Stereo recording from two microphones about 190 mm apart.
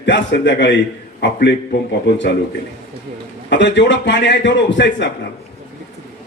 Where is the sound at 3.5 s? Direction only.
70° left (ahead or behind).